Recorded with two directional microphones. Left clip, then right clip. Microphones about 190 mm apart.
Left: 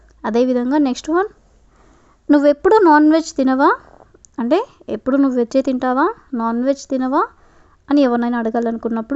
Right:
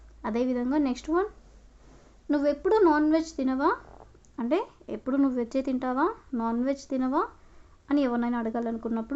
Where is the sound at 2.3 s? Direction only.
60° left (ahead or behind).